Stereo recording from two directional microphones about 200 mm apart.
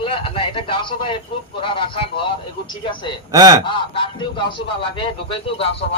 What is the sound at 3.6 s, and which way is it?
A man's voice, 25° left (ahead or behind).